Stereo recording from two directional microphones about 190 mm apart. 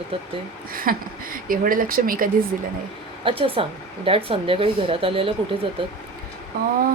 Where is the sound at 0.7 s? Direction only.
50° right (ahead or behind).